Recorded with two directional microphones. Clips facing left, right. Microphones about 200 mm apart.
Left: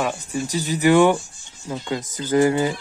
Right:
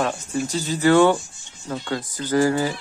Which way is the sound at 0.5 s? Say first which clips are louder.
Left 1 dB; 15° left (ahead or behind).